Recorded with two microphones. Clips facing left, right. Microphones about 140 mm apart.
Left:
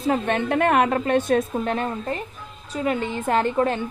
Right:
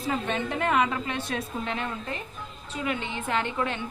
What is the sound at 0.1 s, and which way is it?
A woman's voice, 60° left (ahead or behind).